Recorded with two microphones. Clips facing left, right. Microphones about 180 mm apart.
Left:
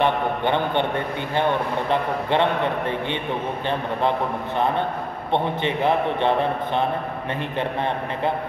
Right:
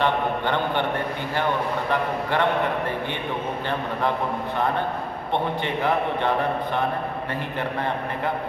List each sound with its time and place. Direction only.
0.0 s a sound: 20° left (ahead or behind)
1.3 s a man's voice: 20° left (ahead or behind)
5.3 s a man's voice: 20° left (ahead or behind)